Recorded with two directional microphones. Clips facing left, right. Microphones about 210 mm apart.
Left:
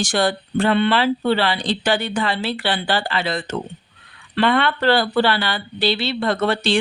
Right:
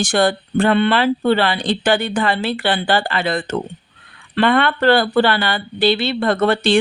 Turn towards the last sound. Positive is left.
turn(degrees=-55)  # may be behind; listen again after turning